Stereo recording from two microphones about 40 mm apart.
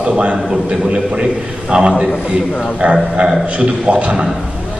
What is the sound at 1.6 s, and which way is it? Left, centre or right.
A man's voice, right.